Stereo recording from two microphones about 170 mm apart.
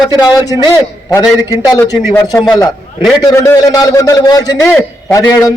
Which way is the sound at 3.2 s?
20° left (ahead or behind).